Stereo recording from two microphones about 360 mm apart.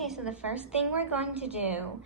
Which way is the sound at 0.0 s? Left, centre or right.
Centre.